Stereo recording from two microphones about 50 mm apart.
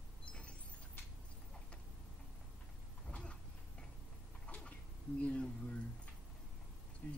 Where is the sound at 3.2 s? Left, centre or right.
Centre.